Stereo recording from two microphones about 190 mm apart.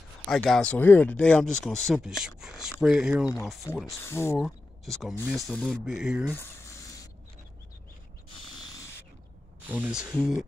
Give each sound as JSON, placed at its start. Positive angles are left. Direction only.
{"t": 0.3, "sound": "speech", "side_deg": 0}
{"t": 4.0, "sound": "speech", "side_deg": 15}
{"t": 4.4, "sound": "speech", "side_deg": 0}
{"t": 6.3, "sound": "a sound", "side_deg": 15}
{"t": 9.7, "sound": "speech", "side_deg": -5}